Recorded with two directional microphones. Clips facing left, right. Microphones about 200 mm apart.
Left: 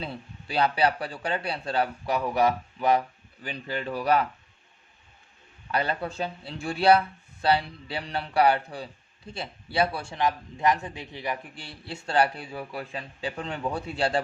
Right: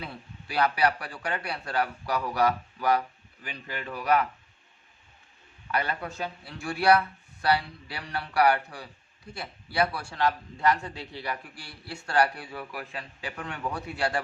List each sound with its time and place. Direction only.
0.0 s a man's voice: 25° left (ahead or behind)
5.7 s a man's voice: 30° left (ahead or behind)